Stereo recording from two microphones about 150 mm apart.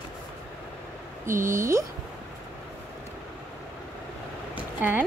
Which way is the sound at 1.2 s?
15° right (ahead or behind).